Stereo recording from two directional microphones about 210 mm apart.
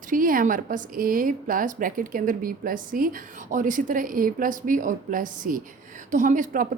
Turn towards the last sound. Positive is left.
turn(degrees=-40)  # may be behind; listen again after turning